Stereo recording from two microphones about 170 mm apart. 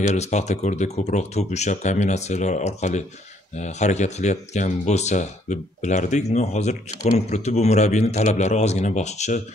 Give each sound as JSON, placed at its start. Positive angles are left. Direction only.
{"t": 0.0, "sound": "a man's voice", "side_deg": 45}